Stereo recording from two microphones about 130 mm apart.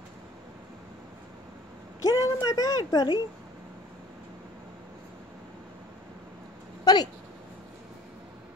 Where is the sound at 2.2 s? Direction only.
30° left (ahead or behind).